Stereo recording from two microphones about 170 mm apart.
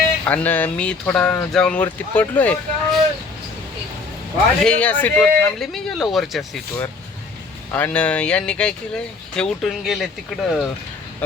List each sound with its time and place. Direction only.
0.3 s speech: 10° left (ahead or behind)
4.6 s speech: 5° left (ahead or behind)
7.7 s speech: 10° left (ahead or behind)